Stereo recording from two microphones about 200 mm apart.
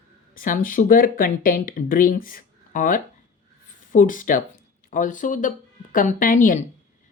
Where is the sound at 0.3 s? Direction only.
45° left (ahead or behind).